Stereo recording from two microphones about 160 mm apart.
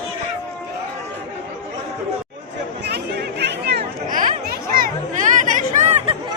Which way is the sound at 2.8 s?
90° right.